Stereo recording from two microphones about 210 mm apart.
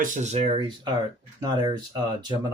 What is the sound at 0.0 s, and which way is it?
Speech, 35° right (ahead or behind).